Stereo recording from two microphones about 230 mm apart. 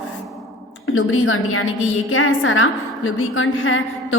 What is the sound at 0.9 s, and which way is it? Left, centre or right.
A woman's voice, left.